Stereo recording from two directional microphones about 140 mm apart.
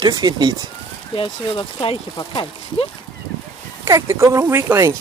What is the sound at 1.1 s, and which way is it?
Speech, 35° left (ahead or behind).